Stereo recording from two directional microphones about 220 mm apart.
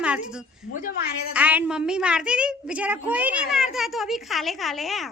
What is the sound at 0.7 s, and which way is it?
Speech, 35° left (ahead or behind).